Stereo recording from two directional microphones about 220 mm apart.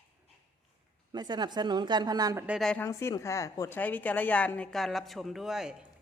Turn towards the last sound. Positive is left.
turn(degrees=-5)  # may be behind; listen again after turning